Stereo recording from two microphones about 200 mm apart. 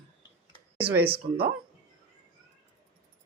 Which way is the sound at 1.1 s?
25° right (ahead or behind).